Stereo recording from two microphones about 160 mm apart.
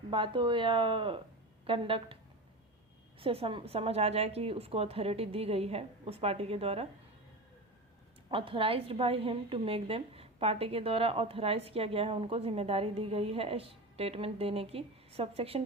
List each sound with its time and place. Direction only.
0.1 s a woman's voice: 30° right (ahead or behind)
3.2 s a woman's voice: 35° right (ahead or behind)
8.3 s a woman's voice: 35° right (ahead or behind)